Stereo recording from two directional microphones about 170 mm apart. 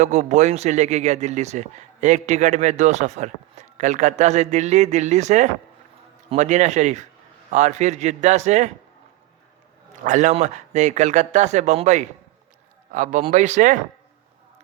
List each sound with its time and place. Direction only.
0.0 s speech: 45° right (ahead or behind)
10.0 s speech: 45° right (ahead or behind)